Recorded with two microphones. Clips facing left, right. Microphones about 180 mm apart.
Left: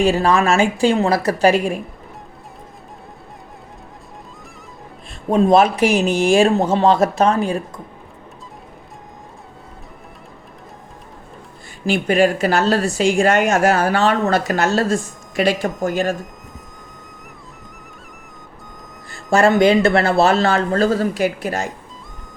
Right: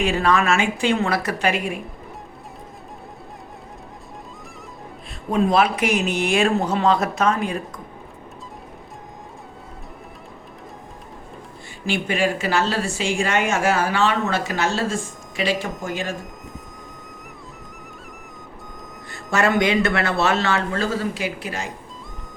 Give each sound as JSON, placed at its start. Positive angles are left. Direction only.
{"t": 0.0, "sound": "a woman's voice", "side_deg": 35}
{"t": 5.3, "sound": "a woman's voice", "side_deg": 40}
{"t": 11.9, "sound": "a woman's voice", "side_deg": 40}
{"t": 19.3, "sound": "a woman's voice", "side_deg": 30}